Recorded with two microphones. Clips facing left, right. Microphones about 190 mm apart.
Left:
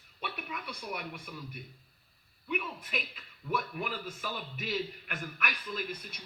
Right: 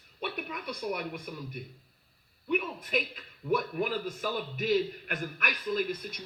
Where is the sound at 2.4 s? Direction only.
45° right (ahead or behind).